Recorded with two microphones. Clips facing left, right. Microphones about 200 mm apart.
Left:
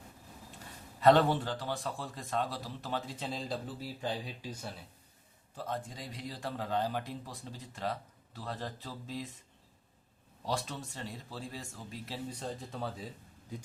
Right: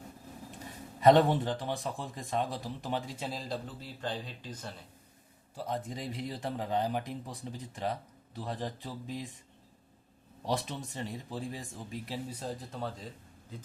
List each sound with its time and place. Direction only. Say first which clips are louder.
1.0 s a man's voice: right 2 dB; 20° right (ahead or behind); by 4.7 s 10° left (ahead or behind)
5.5 s a man's voice: right 3 dB; 15° right (ahead or behind)
10.4 s a man's voice: right 3 dB; 20° right (ahead or behind); by 12.9 s centre (ahead or behind)